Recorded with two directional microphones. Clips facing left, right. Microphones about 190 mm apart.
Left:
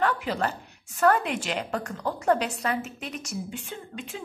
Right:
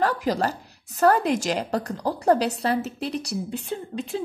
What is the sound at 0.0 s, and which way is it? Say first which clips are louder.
A woman's voice: right 3 dB; 40° right (ahead or behind).